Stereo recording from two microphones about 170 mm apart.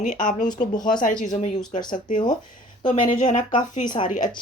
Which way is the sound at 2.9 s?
40° left (ahead or behind).